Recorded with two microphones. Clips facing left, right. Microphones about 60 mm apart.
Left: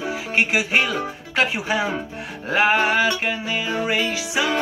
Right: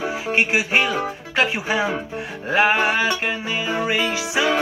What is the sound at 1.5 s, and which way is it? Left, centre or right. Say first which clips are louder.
Music: right 1 dB; centre.